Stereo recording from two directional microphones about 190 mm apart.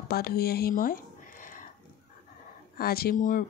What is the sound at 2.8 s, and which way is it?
Speech, 55° left (ahead or behind).